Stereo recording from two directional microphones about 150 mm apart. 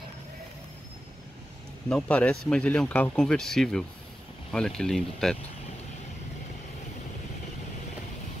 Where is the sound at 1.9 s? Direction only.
10° left (ahead or behind).